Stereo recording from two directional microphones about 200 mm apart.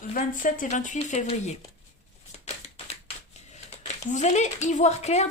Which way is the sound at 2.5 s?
30° left (ahead or behind).